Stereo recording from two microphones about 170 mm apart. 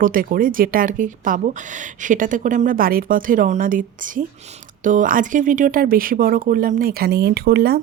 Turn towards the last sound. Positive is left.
turn(degrees=-65)  # may be behind; listen again after turning